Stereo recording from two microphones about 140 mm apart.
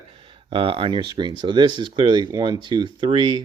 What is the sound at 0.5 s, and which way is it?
Speech, 40° right (ahead or behind).